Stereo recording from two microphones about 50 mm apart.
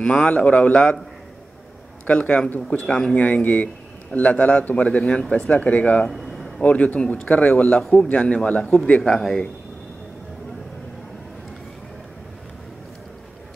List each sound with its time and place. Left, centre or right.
0.0 s a man's voice: left
2.0 s a man's voice: left
4.9 s a man's voice: centre
6.0 s a sound: centre
6.6 s a man's voice: left
9.0 s a man's voice: centre